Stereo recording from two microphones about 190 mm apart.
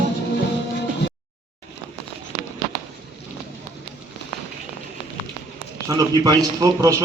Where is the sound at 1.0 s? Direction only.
65° left (ahead or behind).